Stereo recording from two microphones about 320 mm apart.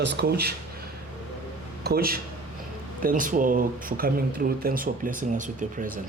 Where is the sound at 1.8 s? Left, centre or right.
Right.